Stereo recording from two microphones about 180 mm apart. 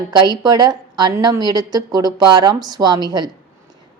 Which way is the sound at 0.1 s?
20° right (ahead or behind).